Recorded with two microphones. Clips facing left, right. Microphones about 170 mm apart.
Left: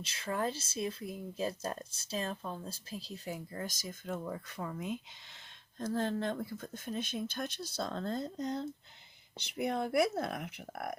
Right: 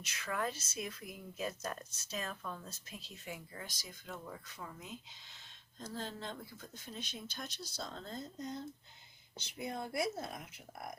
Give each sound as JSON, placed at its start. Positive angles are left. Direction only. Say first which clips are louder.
{"t": 0.0, "sound": "speech", "louder": "left 4 dB", "side_deg": 30}